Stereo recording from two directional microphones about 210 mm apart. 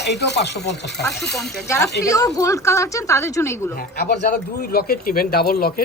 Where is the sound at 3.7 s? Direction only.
45° left (ahead or behind).